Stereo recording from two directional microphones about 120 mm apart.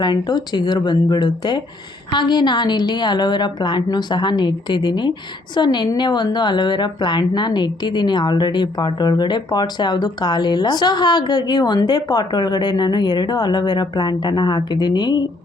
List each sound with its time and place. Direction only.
0.0 s speech: 35° left (ahead or behind)